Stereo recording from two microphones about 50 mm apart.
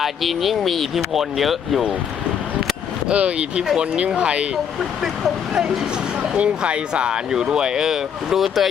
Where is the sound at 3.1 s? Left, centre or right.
Right.